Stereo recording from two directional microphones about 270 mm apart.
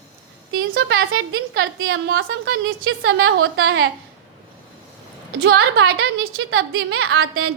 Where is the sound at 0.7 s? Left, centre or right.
Right.